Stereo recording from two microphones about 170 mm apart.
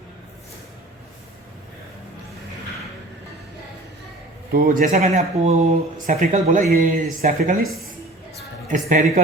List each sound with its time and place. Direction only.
4.5 s speech: 55° right (ahead or behind)
8.7 s speech: 50° right (ahead or behind)